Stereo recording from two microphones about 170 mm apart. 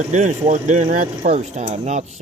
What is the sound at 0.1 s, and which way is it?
Speech, 45° right (ahead or behind).